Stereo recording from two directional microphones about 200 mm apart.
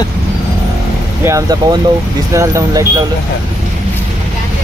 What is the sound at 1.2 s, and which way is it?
Speech, 15° right (ahead or behind).